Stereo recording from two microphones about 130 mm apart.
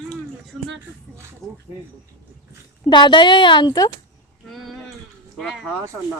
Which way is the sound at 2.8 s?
35° left (ahead or behind).